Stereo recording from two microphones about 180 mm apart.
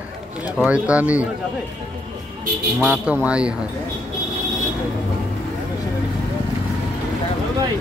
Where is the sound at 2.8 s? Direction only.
5° right (ahead or behind).